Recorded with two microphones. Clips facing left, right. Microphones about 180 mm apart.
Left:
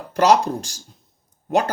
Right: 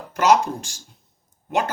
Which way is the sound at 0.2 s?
35° left (ahead or behind).